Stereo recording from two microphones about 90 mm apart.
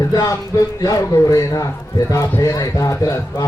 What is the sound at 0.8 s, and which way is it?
A man's voice, 40° left (ahead or behind).